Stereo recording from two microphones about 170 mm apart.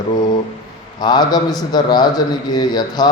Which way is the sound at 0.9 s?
25° left (ahead or behind).